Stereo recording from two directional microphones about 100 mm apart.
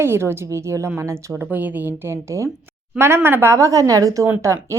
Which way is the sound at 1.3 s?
15° right (ahead or behind).